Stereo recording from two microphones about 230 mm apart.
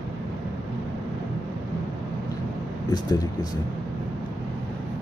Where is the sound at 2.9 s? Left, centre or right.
Centre.